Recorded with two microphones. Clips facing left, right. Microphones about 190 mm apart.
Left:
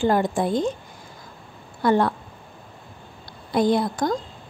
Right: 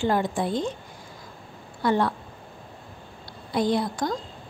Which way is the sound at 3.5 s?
50° left (ahead or behind).